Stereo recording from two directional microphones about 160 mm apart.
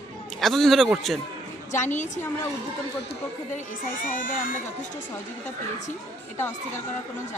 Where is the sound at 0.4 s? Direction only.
Centre (ahead or behind).